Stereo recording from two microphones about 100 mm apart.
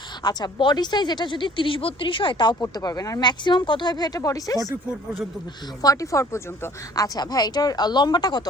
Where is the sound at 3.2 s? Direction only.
50° left (ahead or behind).